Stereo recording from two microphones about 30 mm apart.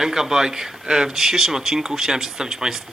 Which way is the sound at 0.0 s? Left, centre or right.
Centre.